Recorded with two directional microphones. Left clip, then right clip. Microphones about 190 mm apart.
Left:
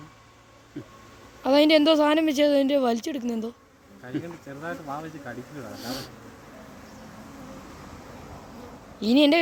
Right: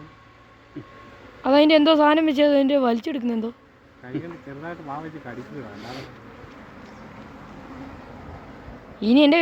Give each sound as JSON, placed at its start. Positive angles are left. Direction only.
{"t": 1.4, "sound": "a woman's voice", "side_deg": 0}
{"t": 4.4, "sound": "speech", "side_deg": 35}
{"t": 5.8, "sound": "speech", "side_deg": 70}
{"t": 9.0, "sound": "speech", "side_deg": 0}